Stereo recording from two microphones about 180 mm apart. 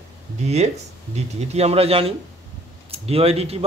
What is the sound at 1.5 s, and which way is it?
Speech, 35° right (ahead or behind).